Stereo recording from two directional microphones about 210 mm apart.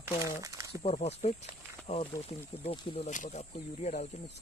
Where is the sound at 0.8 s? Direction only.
30° left (ahead or behind).